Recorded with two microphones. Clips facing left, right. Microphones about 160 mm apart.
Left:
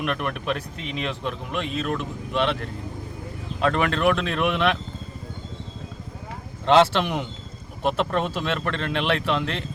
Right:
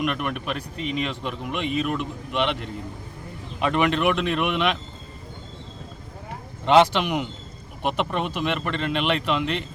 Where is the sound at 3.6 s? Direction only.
15° right (ahead or behind).